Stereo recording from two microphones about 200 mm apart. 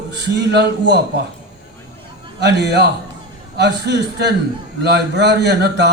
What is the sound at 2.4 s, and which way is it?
A man's voice, 55° right (ahead or behind).